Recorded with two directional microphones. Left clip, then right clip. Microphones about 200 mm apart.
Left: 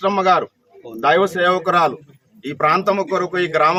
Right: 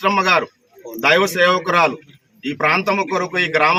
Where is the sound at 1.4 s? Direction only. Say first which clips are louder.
Right 1 dB; 15° left (ahead or behind).